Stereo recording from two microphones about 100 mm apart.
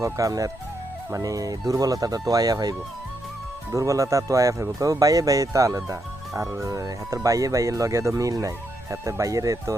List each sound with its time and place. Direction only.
0.0 s speech: 35° right (ahead or behind)